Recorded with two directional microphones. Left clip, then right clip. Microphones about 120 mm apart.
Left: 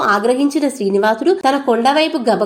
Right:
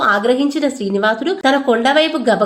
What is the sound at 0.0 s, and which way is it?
A woman's voice, 55° left (ahead or behind).